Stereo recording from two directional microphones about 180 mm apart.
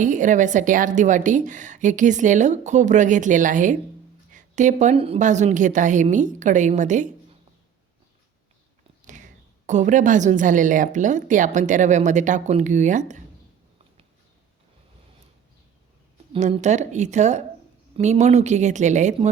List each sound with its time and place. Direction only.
0.0 s a woman's voice: 45° right (ahead or behind)
9.6 s a woman's voice: 45° right (ahead or behind)
16.3 s speech: 40° right (ahead or behind)